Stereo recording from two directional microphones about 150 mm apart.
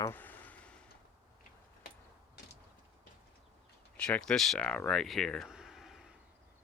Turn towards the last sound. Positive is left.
turn(degrees=-5)  # may be behind; listen again after turning